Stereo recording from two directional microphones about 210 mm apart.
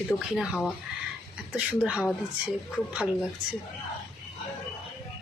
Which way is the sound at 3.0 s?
5° right (ahead or behind).